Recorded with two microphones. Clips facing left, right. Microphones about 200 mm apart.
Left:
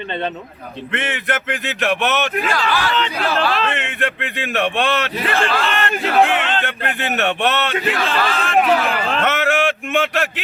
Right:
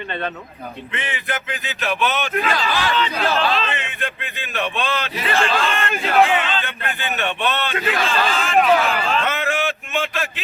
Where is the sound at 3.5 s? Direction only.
60° left (ahead or behind).